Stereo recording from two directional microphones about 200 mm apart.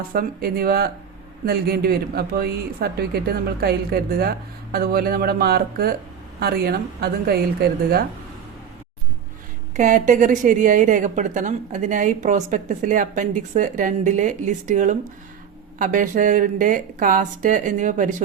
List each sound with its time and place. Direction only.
0.1 s speech: 50° right (ahead or behind)
9.7 s a woman's voice: 40° right (ahead or behind)